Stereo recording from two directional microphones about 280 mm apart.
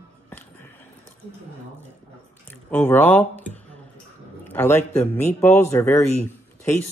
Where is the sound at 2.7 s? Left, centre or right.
Centre.